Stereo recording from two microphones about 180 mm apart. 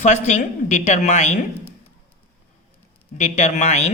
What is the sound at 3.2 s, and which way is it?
Speech, 40° left (ahead or behind).